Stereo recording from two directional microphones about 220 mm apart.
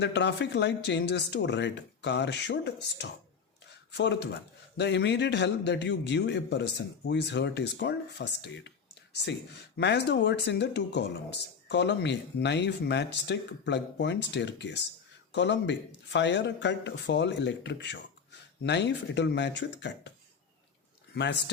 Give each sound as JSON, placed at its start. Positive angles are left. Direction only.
{"t": 0.0, "sound": "speech", "side_deg": 50}
{"t": 21.2, "sound": "speech", "side_deg": 50}